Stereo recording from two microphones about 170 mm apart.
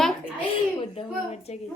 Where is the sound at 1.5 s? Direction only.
40° left (ahead or behind).